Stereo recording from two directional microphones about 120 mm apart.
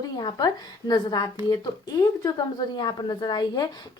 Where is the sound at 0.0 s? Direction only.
35° left (ahead or behind).